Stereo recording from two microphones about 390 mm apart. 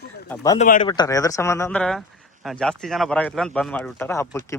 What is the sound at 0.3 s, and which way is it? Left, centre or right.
Speech, centre.